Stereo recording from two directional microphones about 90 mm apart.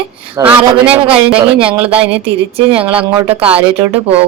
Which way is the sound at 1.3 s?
85° right.